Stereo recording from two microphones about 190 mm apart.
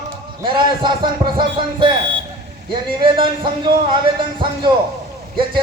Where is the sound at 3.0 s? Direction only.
25° right (ahead or behind).